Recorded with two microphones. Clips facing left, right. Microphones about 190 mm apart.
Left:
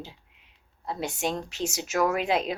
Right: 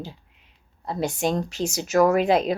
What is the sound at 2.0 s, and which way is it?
Speech, 40° right (ahead or behind).